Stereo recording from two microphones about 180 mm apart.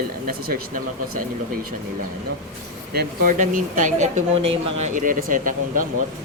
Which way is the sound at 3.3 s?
45° right (ahead or behind).